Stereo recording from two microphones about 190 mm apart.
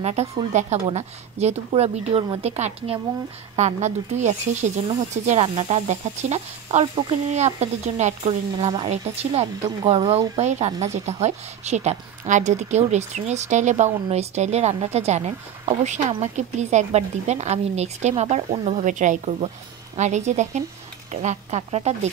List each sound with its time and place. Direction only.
0.0 s speech: 35° right (ahead or behind)